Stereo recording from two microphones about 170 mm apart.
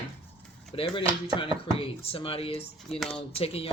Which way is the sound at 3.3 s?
35° left (ahead or behind).